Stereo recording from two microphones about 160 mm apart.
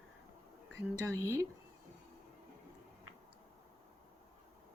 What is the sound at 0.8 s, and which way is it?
Speech, 20° right (ahead or behind).